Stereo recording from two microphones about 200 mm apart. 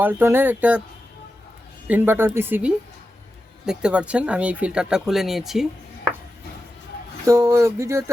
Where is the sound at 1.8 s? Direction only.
10° right (ahead or behind).